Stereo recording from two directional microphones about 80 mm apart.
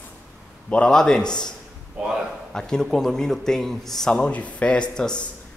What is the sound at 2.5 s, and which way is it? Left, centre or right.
Speech, centre.